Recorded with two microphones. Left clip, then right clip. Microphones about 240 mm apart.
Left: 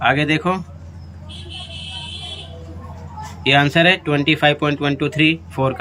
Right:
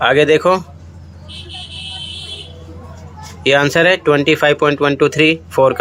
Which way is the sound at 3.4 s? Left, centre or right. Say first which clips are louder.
Right 3 dB; centre.